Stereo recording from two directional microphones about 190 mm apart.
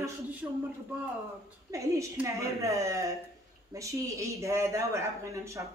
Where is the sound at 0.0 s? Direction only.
10° right (ahead or behind).